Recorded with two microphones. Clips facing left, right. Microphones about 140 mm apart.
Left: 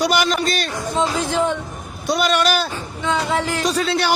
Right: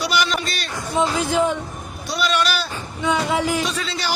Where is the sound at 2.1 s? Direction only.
50° left (ahead or behind).